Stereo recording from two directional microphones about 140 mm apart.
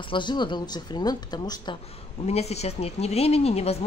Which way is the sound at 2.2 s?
50° left (ahead or behind).